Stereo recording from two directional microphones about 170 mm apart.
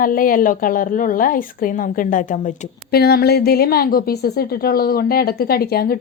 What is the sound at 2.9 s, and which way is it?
Speech, 65° left (ahead or behind).